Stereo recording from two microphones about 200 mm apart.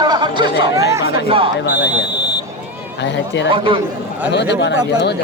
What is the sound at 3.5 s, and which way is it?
Speech, 25° right (ahead or behind).